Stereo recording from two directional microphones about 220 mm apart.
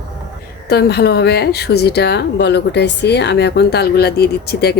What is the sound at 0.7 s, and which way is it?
A woman's voice, 45° left (ahead or behind).